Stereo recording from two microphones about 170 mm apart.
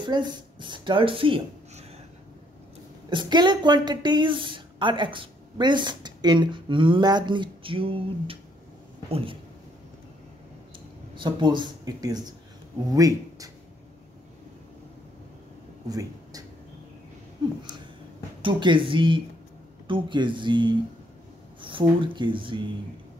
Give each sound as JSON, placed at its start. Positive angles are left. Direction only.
{"t": 0.0, "sound": "speech", "side_deg": -25}
{"t": 3.1, "sound": "speech", "side_deg": -25}
{"t": 11.1, "sound": "speech", "side_deg": -25}
{"t": 15.9, "sound": "speech", "side_deg": -20}
{"t": 18.4, "sound": "speech", "side_deg": -30}